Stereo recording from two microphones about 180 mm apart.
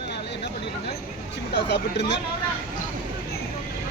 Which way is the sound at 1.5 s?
70° left (ahead or behind).